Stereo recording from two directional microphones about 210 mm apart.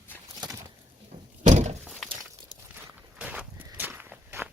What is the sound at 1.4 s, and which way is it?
Thunk, 35° right (ahead or behind).